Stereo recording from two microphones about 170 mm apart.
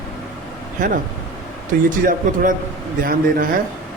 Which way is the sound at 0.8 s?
50° right (ahead or behind).